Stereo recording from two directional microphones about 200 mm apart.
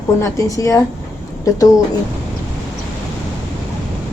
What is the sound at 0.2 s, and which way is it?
A woman's voice, 15° left (ahead or behind).